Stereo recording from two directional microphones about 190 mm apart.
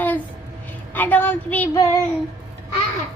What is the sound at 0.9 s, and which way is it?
A woman's voice, 10° left (ahead or behind).